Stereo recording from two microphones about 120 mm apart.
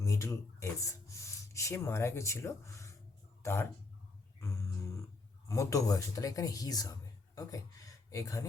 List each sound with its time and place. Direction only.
0.0 s speech: 25° left (ahead or behind)
4.4 s a sound: 25° left (ahead or behind)
5.5 s speech: 25° left (ahead or behind)